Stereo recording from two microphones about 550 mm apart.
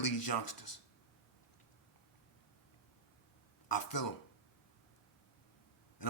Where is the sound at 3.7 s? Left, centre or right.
Left.